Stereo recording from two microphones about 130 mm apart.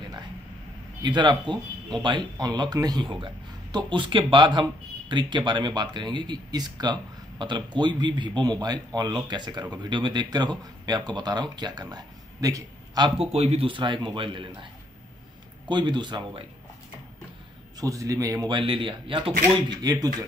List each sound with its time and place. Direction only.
1.0 s speech: 35° right (ahead or behind)
13.2 s speech: 50° right (ahead or behind)
15.7 s speech: 35° right (ahead or behind)
17.7 s a man's voice: 25° right (ahead or behind)
18.6 s speech: 40° right (ahead or behind)
19.7 s a man's voice: 30° right (ahead or behind)